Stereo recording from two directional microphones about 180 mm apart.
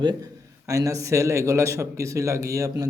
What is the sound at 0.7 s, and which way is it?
Speech, 20° right (ahead or behind).